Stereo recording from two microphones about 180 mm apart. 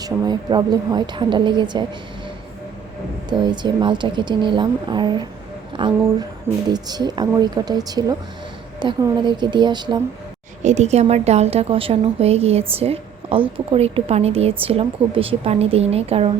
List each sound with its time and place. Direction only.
0.0 s speech: 25° right (ahead or behind)
3.2 s speech: 25° right (ahead or behind)
10.6 s a woman's voice: 40° right (ahead or behind)